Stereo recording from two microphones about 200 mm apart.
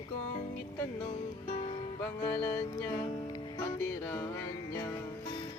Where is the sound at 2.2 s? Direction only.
15° left (ahead or behind).